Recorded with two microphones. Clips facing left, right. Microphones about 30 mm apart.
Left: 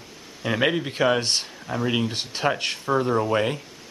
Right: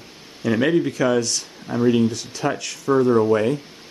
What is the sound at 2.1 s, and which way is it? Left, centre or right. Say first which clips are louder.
Speech: even; left.